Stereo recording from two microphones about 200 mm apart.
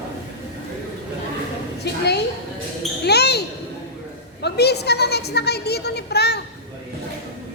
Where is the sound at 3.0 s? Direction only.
55° left (ahead or behind).